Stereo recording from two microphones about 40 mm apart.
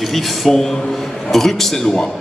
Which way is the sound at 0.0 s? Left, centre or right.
Centre.